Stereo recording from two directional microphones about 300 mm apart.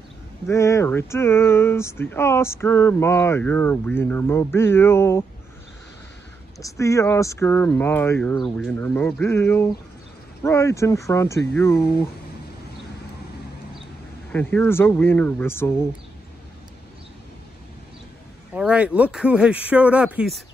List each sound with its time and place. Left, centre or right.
0.5 s speech: centre
6.6 s speech: centre
14.3 s speech: centre
18.5 s a man's voice: centre